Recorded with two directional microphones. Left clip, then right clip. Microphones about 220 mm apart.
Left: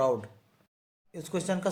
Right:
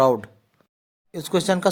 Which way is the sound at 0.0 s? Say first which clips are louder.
Right 9 dB; 40° right (ahead or behind).